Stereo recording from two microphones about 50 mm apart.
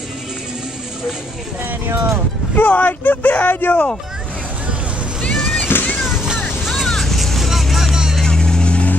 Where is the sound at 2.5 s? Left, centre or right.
Left.